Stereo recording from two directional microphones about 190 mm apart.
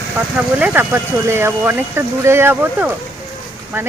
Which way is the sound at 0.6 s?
10° right (ahead or behind).